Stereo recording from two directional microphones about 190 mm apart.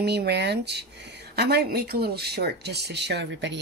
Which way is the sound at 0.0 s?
60° right (ahead or behind).